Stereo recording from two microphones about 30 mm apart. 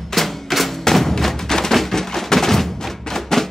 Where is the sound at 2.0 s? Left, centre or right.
Centre.